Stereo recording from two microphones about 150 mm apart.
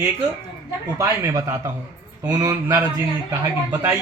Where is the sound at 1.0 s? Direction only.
20° right (ahead or behind).